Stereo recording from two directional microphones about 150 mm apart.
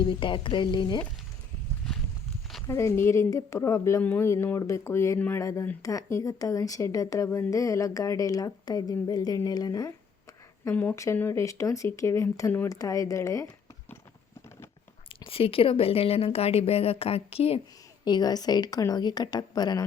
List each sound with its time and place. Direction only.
0.1 s a woman's voice: 35° left (ahead or behind)
2.6 s a woman's voice: 20° left (ahead or behind)
10.6 s a woman's voice: 15° left (ahead or behind)
15.1 s a woman's voice: 40° left (ahead or behind)
18.0 s a woman's voice: 30° left (ahead or behind)